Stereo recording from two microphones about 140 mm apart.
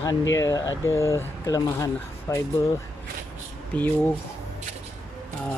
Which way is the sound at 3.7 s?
10° left (ahead or behind).